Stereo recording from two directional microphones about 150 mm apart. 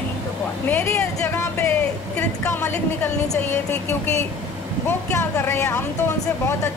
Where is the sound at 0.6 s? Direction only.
15° left (ahead or behind).